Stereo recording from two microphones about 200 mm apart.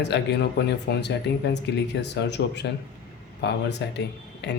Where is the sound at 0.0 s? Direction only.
60° left (ahead or behind).